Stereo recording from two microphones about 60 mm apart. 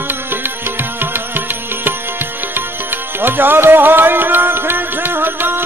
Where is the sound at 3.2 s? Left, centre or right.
Right.